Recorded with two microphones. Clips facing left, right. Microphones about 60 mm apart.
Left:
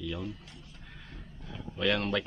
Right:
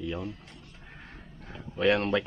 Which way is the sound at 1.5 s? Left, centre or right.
Right.